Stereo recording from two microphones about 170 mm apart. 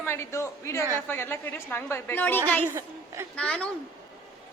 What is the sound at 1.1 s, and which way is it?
A woman's voice, 15° left (ahead or behind).